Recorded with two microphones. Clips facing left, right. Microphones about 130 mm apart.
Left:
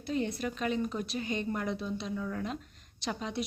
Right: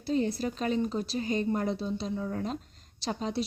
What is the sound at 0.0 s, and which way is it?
A woman's voice, 35° right (ahead or behind).